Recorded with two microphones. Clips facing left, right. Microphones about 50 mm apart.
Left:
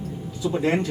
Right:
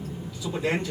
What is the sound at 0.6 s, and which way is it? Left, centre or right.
Speech, left.